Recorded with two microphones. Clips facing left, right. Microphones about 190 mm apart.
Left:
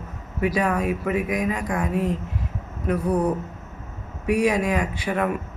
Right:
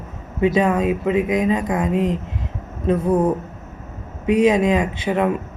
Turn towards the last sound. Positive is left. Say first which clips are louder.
# right 5 dB
turn(degrees=-20)  # may be behind; listen again after turning